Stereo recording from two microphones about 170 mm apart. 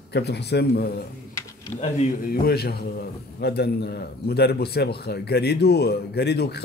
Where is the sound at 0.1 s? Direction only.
75° left (ahead or behind).